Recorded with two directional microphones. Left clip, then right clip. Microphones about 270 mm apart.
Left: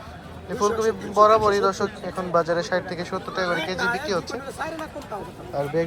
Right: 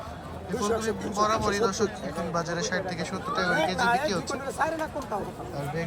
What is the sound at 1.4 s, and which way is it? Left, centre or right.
Speech, centre.